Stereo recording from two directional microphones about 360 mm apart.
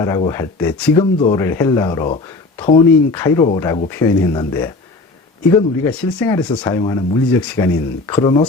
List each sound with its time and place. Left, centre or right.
0.0 s speech: centre